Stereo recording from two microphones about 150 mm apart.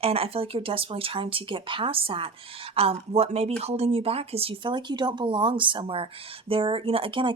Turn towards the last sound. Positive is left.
turn(degrees=-35)  # may be behind; listen again after turning